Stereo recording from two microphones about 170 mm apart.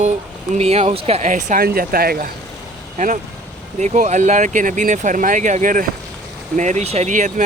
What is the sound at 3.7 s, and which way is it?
Speech, 45° right (ahead or behind).